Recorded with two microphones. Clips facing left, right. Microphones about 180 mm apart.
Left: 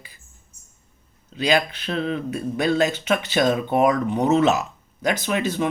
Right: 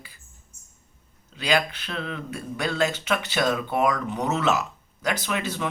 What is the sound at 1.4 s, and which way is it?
Speech, 20° left (ahead or behind).